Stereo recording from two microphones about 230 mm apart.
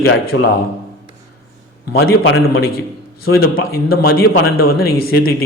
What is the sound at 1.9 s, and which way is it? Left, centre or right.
Speech, left.